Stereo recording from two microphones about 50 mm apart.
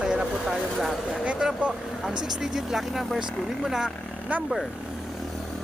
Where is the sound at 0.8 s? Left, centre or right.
Centre.